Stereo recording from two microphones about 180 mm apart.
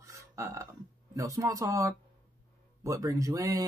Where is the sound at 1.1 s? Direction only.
15° right (ahead or behind).